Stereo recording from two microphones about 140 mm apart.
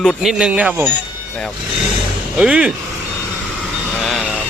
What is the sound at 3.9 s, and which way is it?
Vehicle, 5° left (ahead or behind).